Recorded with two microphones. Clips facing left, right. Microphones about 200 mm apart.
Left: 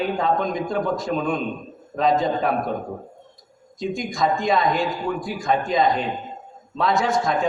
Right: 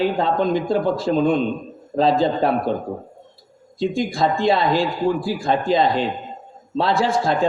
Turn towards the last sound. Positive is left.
turn(degrees=-30)  # may be behind; listen again after turning